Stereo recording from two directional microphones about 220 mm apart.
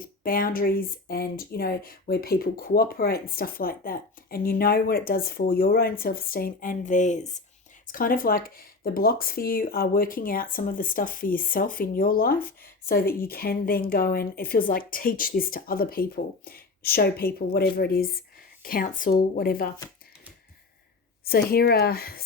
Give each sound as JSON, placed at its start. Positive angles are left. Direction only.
{"t": 0.0, "sound": "speech", "side_deg": 40}
{"t": 21.2, "sound": "speech", "side_deg": 45}